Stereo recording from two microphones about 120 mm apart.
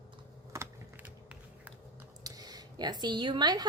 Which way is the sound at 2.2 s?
30° right (ahead or behind).